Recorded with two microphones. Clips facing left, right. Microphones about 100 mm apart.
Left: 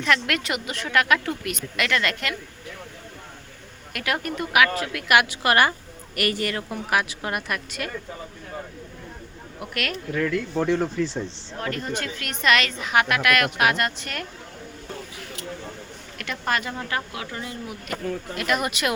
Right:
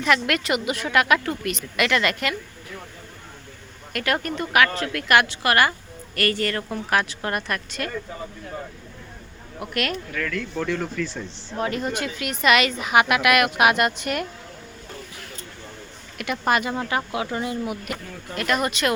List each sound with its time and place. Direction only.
0.0 s speech: 5° right (ahead or behind)
3.9 s speech: 5° left (ahead or behind)
9.6 s speech: centre (ahead or behind)
10.1 s speech: 25° left (ahead or behind)
11.5 s a woman's voice: 20° right (ahead or behind)
16.1 s speech: 10° right (ahead or behind)
18.3 s speech: 5° left (ahead or behind)